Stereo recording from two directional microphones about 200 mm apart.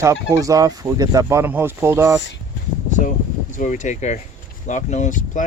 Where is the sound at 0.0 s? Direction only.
15° right (ahead or behind).